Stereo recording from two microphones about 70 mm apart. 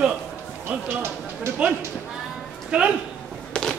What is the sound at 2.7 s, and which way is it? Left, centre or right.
Speech, centre.